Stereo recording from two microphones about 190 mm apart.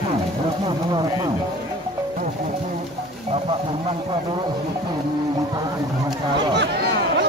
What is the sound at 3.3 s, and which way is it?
Speech, 30° right (ahead or behind).